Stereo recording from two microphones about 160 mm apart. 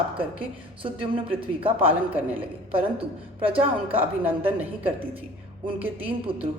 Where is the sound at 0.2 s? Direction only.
35° right (ahead or behind).